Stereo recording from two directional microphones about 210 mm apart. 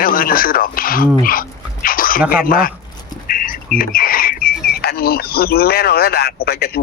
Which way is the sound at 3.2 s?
40° left (ahead or behind).